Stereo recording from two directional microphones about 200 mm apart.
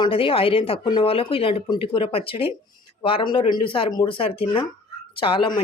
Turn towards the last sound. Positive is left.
turn(degrees=25)  # may be behind; listen again after turning